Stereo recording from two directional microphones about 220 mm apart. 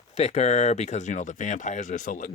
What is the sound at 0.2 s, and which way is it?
Speech, 30° left (ahead or behind).